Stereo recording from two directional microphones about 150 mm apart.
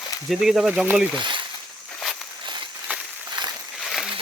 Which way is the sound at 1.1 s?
30° right (ahead or behind).